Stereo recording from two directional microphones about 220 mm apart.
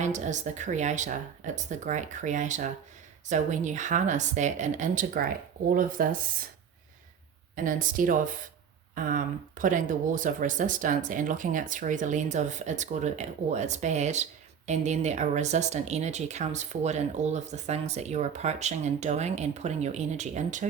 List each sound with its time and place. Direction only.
0.0 s speech: 35° right (ahead or behind)
7.5 s speech: 35° right (ahead or behind)